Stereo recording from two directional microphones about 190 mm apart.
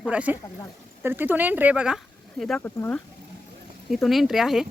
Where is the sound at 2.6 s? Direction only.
10° left (ahead or behind).